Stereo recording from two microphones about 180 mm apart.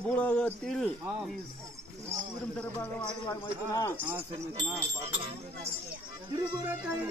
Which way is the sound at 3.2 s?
25° left (ahead or behind).